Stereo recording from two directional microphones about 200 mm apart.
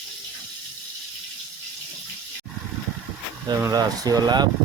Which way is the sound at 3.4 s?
20° right (ahead or behind).